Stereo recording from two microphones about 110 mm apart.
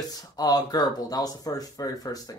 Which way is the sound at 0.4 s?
35° left (ahead or behind).